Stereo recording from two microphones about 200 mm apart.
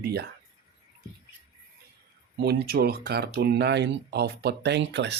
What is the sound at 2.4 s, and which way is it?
Speech, 50° right (ahead or behind).